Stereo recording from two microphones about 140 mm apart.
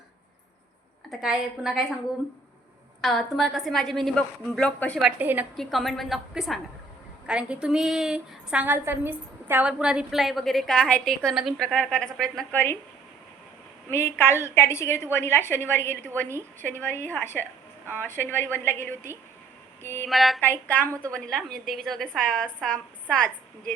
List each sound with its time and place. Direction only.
1.2 s a woman's voice: 5° right (ahead or behind)
3.0 s a woman's voice: centre (ahead or behind)
5.2 s a woman's voice: 15° right (ahead or behind)
5.5 s a woman's voice: 5° left (ahead or behind)
13.9 s a woman's voice: 15° left (ahead or behind)
20.1 s a woman's voice: centre (ahead or behind)
20.4 s a woman's voice: 10° left (ahead or behind)